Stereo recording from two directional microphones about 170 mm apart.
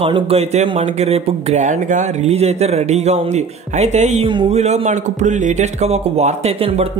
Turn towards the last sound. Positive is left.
turn(degrees=-35)  # may be behind; listen again after turning